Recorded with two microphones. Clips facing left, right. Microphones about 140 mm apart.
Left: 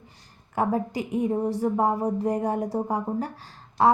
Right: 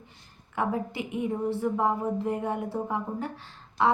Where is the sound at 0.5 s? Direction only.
40° left (ahead or behind).